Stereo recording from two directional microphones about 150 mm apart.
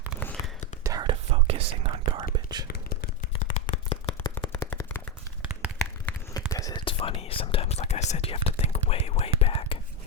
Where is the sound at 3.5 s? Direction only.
45° left (ahead or behind).